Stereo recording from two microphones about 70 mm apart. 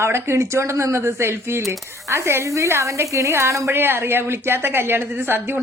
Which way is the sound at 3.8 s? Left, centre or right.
Right.